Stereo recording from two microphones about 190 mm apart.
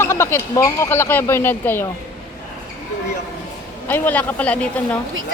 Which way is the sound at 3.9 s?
10° left (ahead or behind).